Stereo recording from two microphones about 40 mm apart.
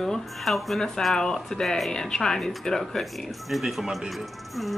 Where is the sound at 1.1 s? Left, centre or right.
Centre.